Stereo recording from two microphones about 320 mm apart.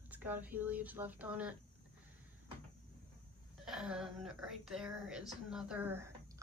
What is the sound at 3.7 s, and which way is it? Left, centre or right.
Speech, centre.